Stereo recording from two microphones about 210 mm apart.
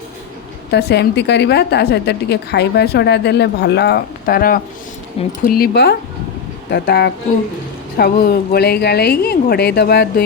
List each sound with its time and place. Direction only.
0.7 s a woman's voice: 50° left (ahead or behind)